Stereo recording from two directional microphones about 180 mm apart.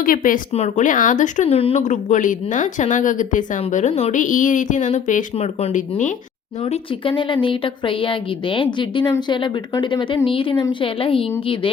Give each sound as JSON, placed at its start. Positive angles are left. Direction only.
{"t": 0.0, "sound": "speech", "side_deg": 50}
{"t": 6.7, "sound": "a woman's voice", "side_deg": 30}